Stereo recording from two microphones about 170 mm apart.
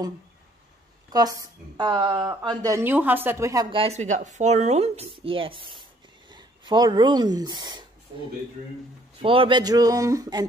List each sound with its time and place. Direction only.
1.1 s a woman's voice: 20° right (ahead or behind)
3.7 s speech: 35° right (ahead or behind)
9.2 s a woman's voice: 30° right (ahead or behind)